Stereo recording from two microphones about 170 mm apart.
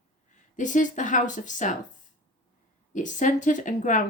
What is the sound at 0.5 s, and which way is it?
Speech, 50° left (ahead or behind).